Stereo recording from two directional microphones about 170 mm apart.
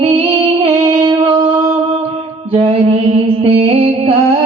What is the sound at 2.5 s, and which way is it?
Mantra, 35° right (ahead or behind).